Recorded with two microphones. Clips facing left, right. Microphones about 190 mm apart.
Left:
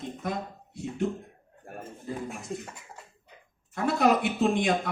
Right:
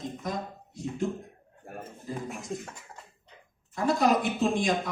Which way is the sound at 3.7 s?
65° left (ahead or behind).